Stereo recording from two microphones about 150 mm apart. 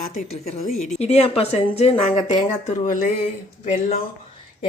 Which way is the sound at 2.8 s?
65° left (ahead or behind).